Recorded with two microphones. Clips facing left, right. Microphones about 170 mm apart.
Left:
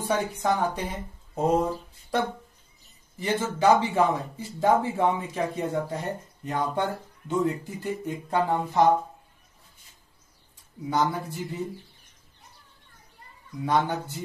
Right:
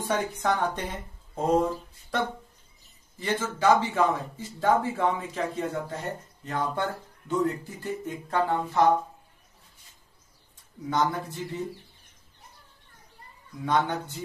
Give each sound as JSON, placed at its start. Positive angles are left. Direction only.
{"t": 0.1, "sound": "speech", "side_deg": 10}
{"t": 3.2, "sound": "a man's voice", "side_deg": 20}
{"t": 10.9, "sound": "speech", "side_deg": 5}
{"t": 13.6, "sound": "speech", "side_deg": 10}